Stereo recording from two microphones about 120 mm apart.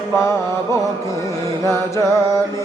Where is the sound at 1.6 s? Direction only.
25° left (ahead or behind).